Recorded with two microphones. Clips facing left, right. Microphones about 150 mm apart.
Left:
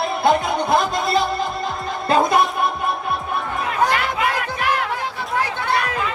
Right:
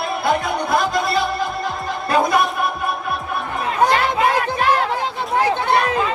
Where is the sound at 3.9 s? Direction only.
30° right (ahead or behind).